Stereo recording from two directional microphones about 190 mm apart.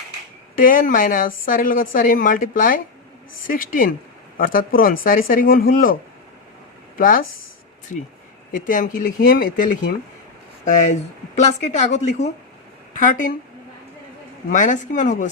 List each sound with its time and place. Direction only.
0.5 s a woman's voice: 45° left (ahead or behind)
8.5 s a woman's voice: 45° left (ahead or behind)
10.9 s a woman's voice: 35° left (ahead or behind)
14.5 s speech: 40° left (ahead or behind)